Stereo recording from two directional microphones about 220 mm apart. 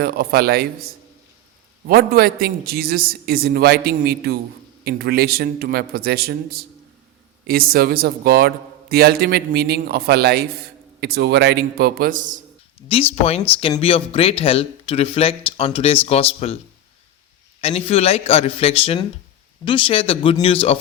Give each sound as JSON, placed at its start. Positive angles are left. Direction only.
{"t": 0.0, "sound": "a man's voice", "side_deg": -45}
{"t": 1.9, "sound": "a man's voice", "side_deg": -45}
{"t": 12.9, "sound": "speech", "side_deg": 25}
{"t": 17.6, "sound": "speech", "side_deg": 25}